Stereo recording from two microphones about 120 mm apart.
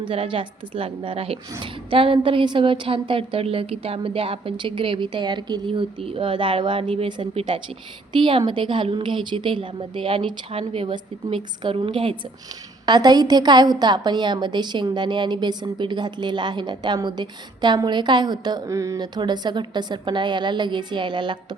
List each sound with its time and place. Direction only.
0.0 s a woman's voice: 45° right (ahead or behind)
12.8 s a woman's voice: 35° right (ahead or behind)